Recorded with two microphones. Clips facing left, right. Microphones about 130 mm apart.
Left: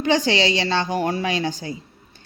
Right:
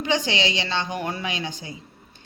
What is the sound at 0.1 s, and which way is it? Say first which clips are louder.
Speech: left 5 dB; 40° left (ahead or behind).